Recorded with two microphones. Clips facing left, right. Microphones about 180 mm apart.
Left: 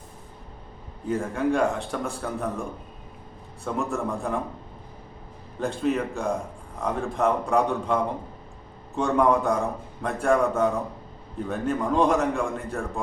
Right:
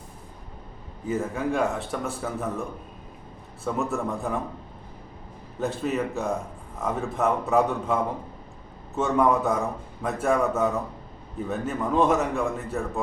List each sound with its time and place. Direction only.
1.0 s a man's voice: centre (ahead or behind)
5.5 s a man's voice: 5° right (ahead or behind)
9.0 s a man's voice: centre (ahead or behind)